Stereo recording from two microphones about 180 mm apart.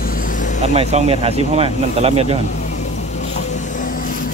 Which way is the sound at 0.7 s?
35° right (ahead or behind).